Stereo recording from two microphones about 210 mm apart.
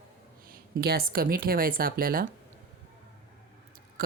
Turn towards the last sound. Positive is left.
turn(degrees=-45)  # may be behind; listen again after turning